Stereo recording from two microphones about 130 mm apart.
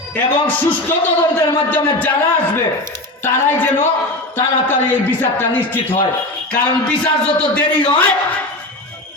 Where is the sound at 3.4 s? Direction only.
15° left (ahead or behind).